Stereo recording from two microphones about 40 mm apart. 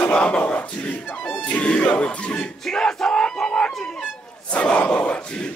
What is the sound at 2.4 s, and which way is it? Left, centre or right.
Crowd, centre.